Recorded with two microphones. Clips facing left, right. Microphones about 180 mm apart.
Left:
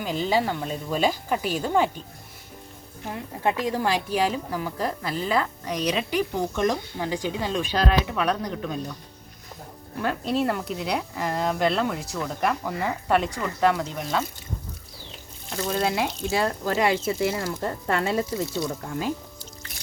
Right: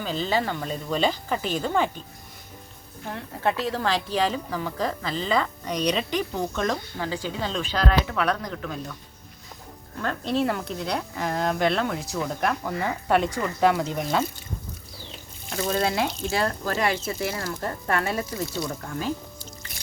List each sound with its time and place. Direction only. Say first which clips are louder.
0.0 s a woman's voice: left 2 dB; 15° left (ahead or behind)
3.1 s a woman's voice: even; 15° left (ahead or behind)
10.0 s speech: even; 5° left (ahead or behind)
15.4 s speech: right 1 dB; 5° right (ahead or behind)
15.7 s speech: even; 10° left (ahead or behind)